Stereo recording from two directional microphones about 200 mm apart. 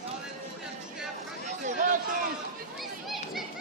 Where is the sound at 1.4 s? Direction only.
40° right (ahead or behind).